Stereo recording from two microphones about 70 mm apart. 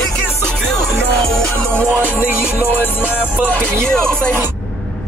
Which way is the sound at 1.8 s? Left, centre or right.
Left.